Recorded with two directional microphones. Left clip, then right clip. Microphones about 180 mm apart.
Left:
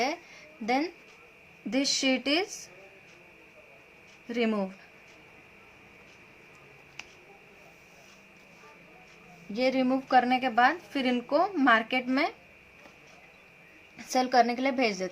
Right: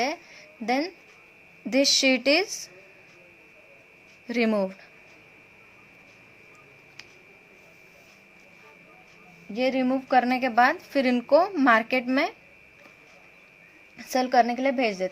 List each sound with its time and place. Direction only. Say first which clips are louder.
0.0 s music: right 2 dB; 25° right (ahead or behind)
1.7 s a woman's voice: right 6 dB; 25° right (ahead or behind)
4.3 s a woman's voice: right 5 dB; 25° right (ahead or behind)
9.5 s a woman's voice: right 2 dB; 15° right (ahead or behind)
14.0 s a woman's voice: right 2 dB; 20° right (ahead or behind)